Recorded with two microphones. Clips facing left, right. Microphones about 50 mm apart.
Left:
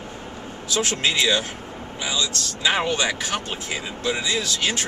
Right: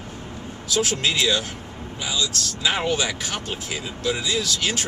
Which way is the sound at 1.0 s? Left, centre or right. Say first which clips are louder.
Left 1 dB; centre.